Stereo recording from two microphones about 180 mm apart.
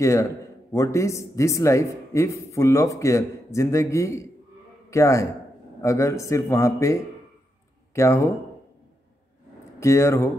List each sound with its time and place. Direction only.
0.0 s speech: 15° left (ahead or behind)
9.8 s speech: 15° left (ahead or behind)